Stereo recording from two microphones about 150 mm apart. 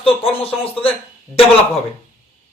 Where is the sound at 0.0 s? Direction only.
40° left (ahead or behind).